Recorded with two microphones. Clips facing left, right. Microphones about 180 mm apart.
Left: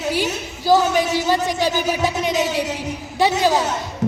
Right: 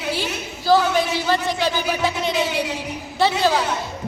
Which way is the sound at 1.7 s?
45° left (ahead or behind).